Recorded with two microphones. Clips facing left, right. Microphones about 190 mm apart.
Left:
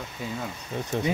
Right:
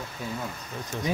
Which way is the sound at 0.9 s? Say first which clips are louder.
Left 5 dB; 60° left (ahead or behind).